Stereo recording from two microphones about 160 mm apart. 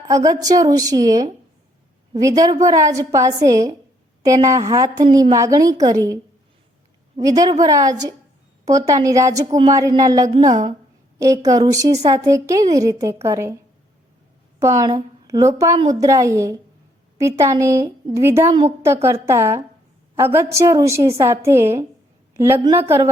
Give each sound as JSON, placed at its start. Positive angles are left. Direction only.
{"t": 0.1, "sound": "a woman's voice", "side_deg": -20}
{"t": 7.2, "sound": "a woman's voice", "side_deg": -20}
{"t": 14.6, "sound": "a woman's voice", "side_deg": -20}